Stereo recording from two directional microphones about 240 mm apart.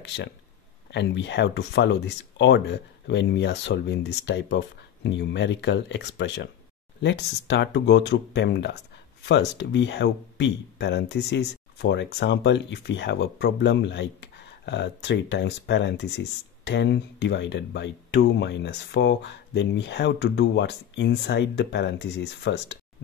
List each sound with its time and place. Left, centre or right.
0.0 s speech: left